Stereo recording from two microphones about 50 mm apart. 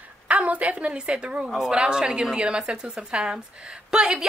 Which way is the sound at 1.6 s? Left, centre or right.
Centre.